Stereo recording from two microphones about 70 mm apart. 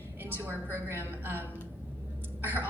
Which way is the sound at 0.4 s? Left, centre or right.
Right.